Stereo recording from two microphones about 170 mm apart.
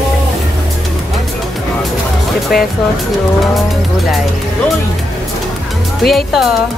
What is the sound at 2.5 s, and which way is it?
Speech, 60° left (ahead or behind).